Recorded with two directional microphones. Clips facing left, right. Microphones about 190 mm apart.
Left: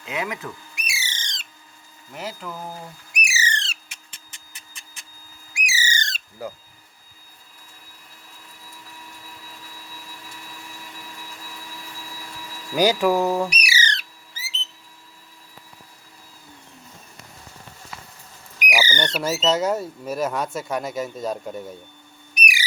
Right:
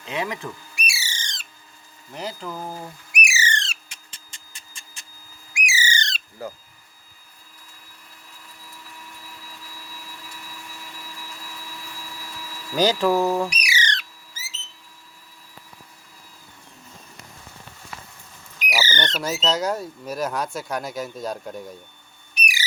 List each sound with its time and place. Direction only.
0.0 s speech: centre (ahead or behind)
0.8 s bird: 20° left (ahead or behind)
2.1 s speech: 5° left (ahead or behind)
2.5 s speech: 10° right (ahead or behind)
3.2 s bird: 35° left (ahead or behind)
5.5 s bird: 40° left (ahead or behind)
12.7 s squawk: 10° left (ahead or behind)
18.6 s speech: 10° left (ahead or behind)
22.4 s a sound: 15° left (ahead or behind)